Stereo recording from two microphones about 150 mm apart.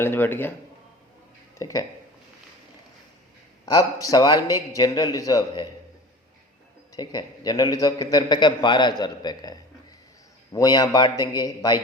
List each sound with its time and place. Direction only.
0.0 s speech: 15° left (ahead or behind)
1.5 s speech: 20° left (ahead or behind)
3.7 s a man's voice: 25° left (ahead or behind)
6.9 s a man's voice: 25° left (ahead or behind)